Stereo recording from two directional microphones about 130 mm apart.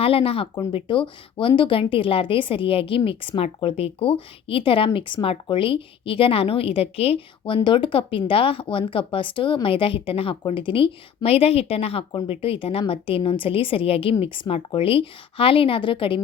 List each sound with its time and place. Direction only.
0.0 s a woman's voice: 45° left (ahead or behind)